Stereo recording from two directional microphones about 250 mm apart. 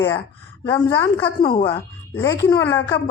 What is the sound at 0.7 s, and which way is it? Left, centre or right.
Speech, centre.